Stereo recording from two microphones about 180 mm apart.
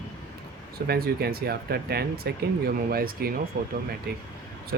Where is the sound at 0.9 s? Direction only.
60° right (ahead or behind).